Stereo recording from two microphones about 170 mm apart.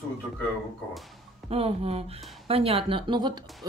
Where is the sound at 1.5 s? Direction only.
35° right (ahead or behind).